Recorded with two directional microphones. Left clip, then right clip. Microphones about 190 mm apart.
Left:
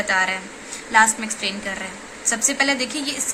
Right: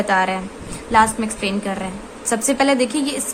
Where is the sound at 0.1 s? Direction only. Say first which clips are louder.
Right 2 dB; 55° right (ahead or behind).